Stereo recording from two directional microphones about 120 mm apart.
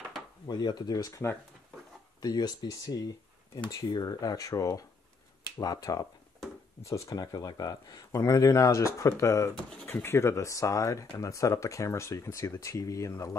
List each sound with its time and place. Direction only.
0.5 s speech: 35° left (ahead or behind)
2.2 s speech: 35° left (ahead or behind)